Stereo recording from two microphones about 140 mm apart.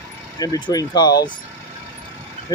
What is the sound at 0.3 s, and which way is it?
Speech, 25° left (ahead or behind).